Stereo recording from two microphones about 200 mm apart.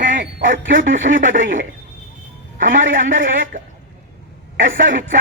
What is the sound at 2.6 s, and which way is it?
A man's voice, 45° right (ahead or behind).